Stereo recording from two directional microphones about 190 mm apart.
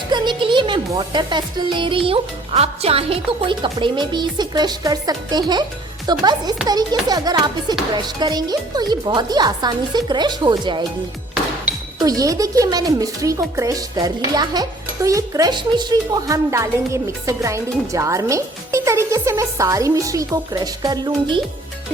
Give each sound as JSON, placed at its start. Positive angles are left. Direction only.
{"t": 0.1, "sound": "a sound", "side_deg": -25}
{"t": 0.9, "sound": "speech", "side_deg": -25}
{"t": 11.9, "sound": "speech", "side_deg": -20}